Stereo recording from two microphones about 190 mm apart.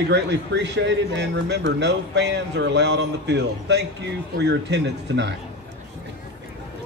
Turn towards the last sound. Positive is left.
turn(degrees=-65)  # may be behind; listen again after turning